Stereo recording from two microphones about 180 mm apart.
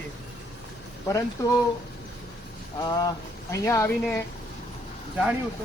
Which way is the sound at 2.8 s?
20° left (ahead or behind).